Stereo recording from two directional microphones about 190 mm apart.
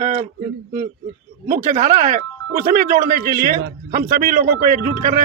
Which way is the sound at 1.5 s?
40° right (ahead or behind).